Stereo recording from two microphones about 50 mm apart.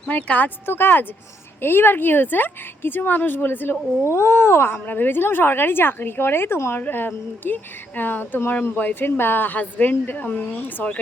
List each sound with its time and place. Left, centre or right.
0.1 s a woman's voice: left
0.6 s a woman's voice: left
4.1 s speech: left
4.9 s a woman's voice: left
6.7 s a woman's voice: left
8.7 s a woman's voice: left
9.0 s a woman's voice: left
9.6 s a woman's voice: left